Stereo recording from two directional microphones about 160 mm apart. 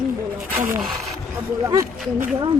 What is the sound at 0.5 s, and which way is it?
Speech, 15° right (ahead or behind).